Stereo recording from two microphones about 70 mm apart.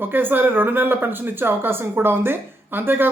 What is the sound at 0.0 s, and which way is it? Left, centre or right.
Speech, right.